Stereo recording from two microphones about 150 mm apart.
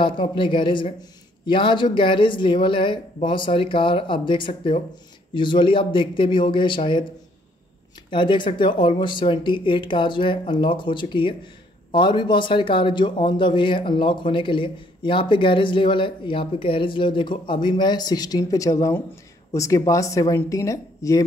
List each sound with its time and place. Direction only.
0.0 s a man's voice: 35° left (ahead or behind)
8.1 s a man's voice: 35° left (ahead or behind)